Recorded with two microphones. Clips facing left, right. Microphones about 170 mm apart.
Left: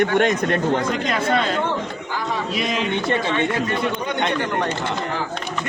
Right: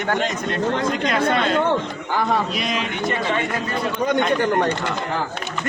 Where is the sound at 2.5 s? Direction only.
Centre (ahead or behind).